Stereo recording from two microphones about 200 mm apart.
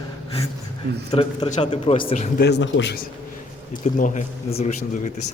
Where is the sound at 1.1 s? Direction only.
25° left (ahead or behind).